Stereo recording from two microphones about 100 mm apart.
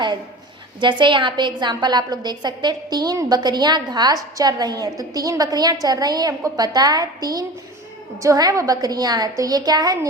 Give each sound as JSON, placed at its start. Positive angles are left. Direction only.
{"t": 0.8, "sound": "a woman's voice", "side_deg": -50}